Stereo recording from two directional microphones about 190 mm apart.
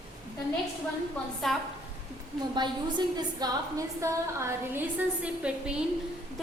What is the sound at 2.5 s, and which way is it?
A woman's voice, 25° right (ahead or behind).